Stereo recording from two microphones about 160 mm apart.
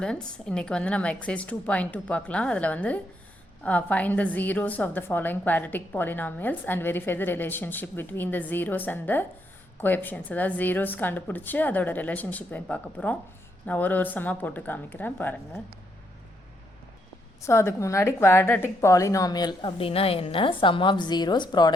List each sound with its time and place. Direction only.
0.0 s a woman's voice: 5° left (ahead or behind)
17.4 s a woman's voice: 15° left (ahead or behind)